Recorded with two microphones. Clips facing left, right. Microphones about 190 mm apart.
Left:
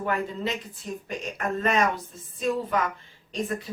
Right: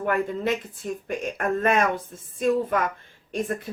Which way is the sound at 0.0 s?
55° right (ahead or behind).